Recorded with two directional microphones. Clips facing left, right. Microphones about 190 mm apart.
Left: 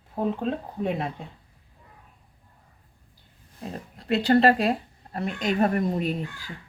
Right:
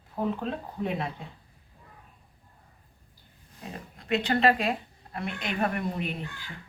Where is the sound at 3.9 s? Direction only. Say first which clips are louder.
Left 6 dB; 35° left (ahead or behind).